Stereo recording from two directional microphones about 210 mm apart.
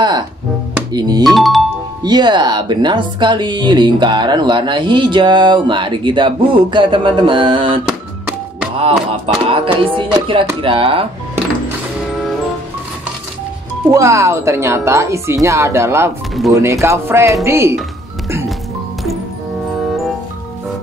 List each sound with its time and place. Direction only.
0.9 s speech: 20° right (ahead or behind)
1.2 s speech: centre (ahead or behind)
2.0 s speech: 20° right (ahead or behind)
7.8 s music: 5° right (ahead or behind)
8.7 s speech: 25° right (ahead or behind)
13.8 s speech: 15° right (ahead or behind)